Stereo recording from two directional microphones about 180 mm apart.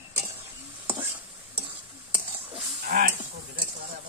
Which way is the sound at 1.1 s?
30° right (ahead or behind).